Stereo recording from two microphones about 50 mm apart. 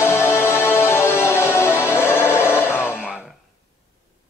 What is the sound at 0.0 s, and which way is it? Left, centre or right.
Music, left.